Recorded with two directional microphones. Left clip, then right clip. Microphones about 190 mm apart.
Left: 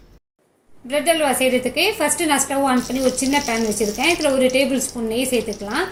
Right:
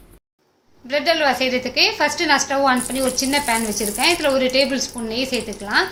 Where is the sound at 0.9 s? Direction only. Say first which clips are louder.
Even; 25° right (ahead or behind).